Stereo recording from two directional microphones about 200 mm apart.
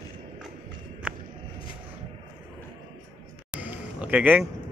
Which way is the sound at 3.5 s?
5° right (ahead or behind).